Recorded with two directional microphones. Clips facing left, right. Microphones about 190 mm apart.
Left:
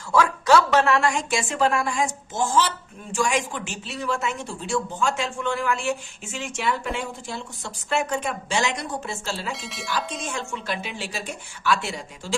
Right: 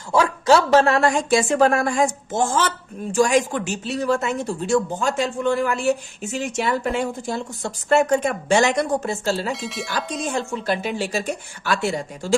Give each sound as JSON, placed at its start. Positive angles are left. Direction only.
{"t": 0.1, "sound": "speech", "side_deg": -30}
{"t": 9.5, "sound": "speech", "side_deg": 0}
{"t": 10.2, "sound": "speech", "side_deg": -35}